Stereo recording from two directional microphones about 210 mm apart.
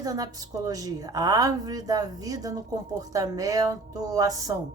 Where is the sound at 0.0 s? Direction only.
15° right (ahead or behind).